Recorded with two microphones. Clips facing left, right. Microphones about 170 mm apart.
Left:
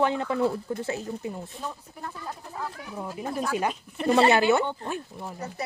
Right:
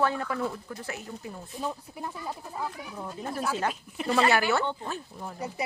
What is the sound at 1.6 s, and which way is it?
Speech, 10° right (ahead or behind).